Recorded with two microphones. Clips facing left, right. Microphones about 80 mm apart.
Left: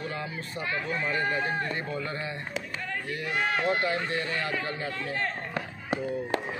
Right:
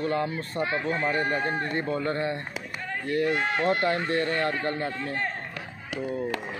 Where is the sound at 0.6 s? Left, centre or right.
Right.